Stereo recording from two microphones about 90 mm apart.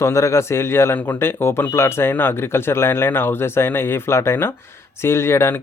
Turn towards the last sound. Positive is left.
turn(degrees=30)  # may be behind; listen again after turning